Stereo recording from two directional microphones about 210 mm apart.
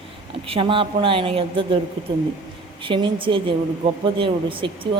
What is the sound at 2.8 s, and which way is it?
Speech, 25° right (ahead or behind).